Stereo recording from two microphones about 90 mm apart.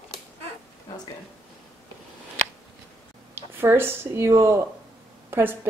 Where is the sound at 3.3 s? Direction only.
25° right (ahead or behind).